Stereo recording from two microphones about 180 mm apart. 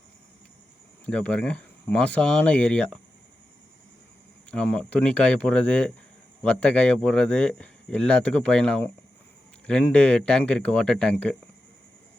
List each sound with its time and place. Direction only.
1.0 s speech: 5° left (ahead or behind)
4.5 s speech: 5° left (ahead or behind)